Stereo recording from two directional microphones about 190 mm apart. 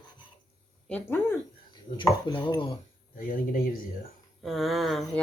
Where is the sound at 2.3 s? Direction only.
25° left (ahead or behind).